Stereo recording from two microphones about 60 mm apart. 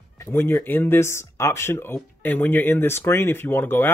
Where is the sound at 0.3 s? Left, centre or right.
Left.